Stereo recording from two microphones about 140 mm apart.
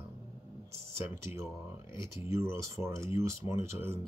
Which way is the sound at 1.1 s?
20° right (ahead or behind).